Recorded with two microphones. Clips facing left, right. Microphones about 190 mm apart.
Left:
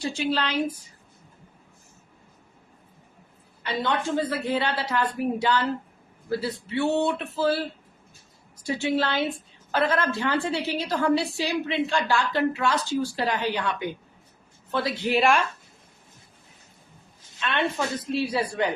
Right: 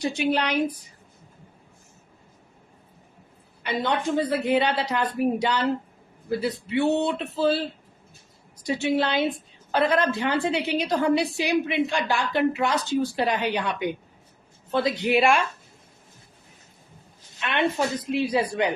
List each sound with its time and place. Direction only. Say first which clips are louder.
0.0 s a woman's voice: right 3 dB; 15° right (ahead or behind)
3.6 s a woman's voice: right 1 dB; 15° right (ahead or behind)
17.4 s a woman's voice: right 2 dB; 15° right (ahead or behind)